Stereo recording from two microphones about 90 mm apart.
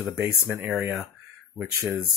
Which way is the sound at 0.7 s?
5° right (ahead or behind).